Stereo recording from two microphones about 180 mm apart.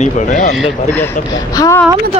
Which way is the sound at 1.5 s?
20° left (ahead or behind).